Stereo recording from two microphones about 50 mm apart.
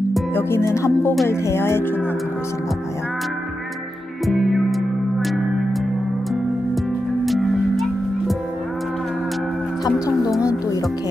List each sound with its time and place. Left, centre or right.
0.3 s speech: left
4.3 s music: centre